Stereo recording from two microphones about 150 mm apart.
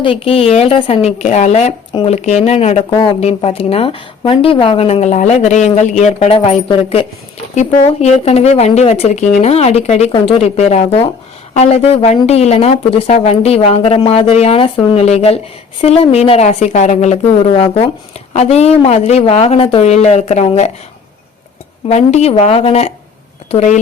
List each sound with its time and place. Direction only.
0.0 s a woman's voice: 40° left (ahead or behind)
2.9 s a woman's voice: 35° left (ahead or behind)
21.8 s speech: 45° left (ahead or behind)